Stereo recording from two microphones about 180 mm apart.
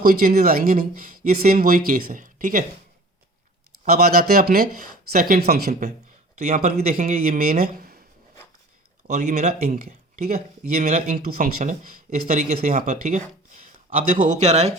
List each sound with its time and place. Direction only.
0.0 s speech: 50° right (ahead or behind)
3.8 s speech: 55° right (ahead or behind)
6.5 s speech: 50° right (ahead or behind)
9.0 s speech: 40° right (ahead or behind)